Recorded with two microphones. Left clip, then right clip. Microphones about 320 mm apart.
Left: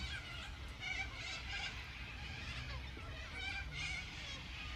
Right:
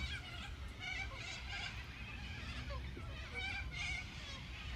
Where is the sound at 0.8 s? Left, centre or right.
Right.